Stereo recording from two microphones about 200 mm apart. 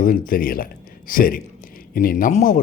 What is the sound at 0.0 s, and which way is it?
Speech, 45° left (ahead or behind).